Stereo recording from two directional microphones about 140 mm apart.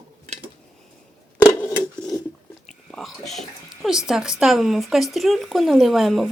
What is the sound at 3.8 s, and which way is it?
A woman's voice, 5° right (ahead or behind).